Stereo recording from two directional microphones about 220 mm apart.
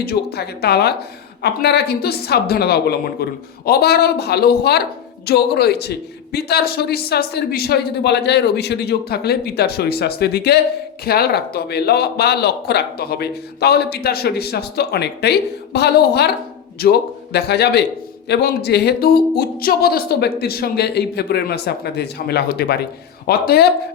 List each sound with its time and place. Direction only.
0.0 s speech: 45° left (ahead or behind)